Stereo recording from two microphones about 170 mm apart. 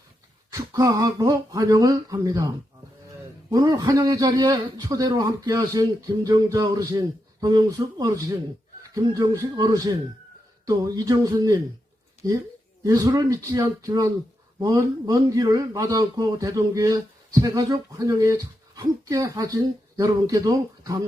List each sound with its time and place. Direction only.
0.5 s speech: 20° right (ahead or behind)
3.5 s speech: 20° right (ahead or behind)